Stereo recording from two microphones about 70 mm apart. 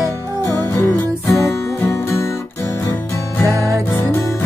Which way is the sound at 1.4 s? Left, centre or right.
Left.